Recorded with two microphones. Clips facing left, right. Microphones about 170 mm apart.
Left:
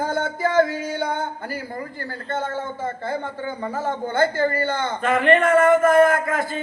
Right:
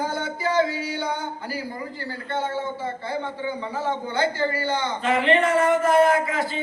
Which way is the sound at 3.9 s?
50° left (ahead or behind).